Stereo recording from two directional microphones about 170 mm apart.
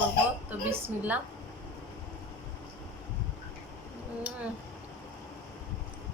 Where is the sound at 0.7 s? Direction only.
10° right (ahead or behind).